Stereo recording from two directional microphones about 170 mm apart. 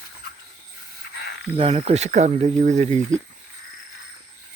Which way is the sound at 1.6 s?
35° right (ahead or behind).